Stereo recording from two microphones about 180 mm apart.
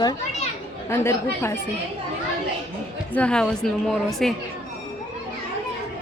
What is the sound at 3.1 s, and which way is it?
A woman's voice, 5° left (ahead or behind).